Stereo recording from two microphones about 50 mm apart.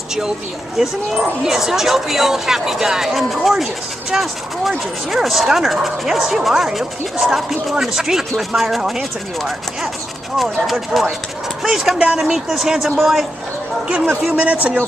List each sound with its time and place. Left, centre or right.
0.7 s speech: centre
14.2 s a man's voice: right